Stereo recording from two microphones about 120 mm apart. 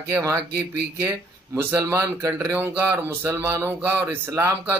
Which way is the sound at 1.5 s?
30° right (ahead or behind).